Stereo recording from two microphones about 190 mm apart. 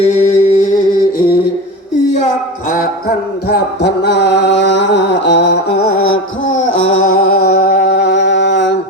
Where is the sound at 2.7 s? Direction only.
50° left (ahead or behind); by 6.2 s 75° left (ahead or behind).